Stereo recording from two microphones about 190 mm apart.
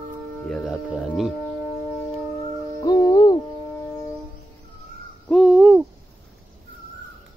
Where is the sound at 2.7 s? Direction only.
20° left (ahead or behind).